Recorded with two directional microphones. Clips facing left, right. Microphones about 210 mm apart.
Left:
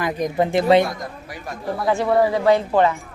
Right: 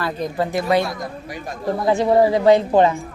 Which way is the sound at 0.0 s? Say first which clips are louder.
Left 2 dB; 15° left (ahead or behind).